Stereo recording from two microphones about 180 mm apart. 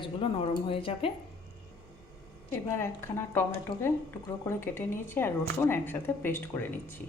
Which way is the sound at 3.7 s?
25° left (ahead or behind).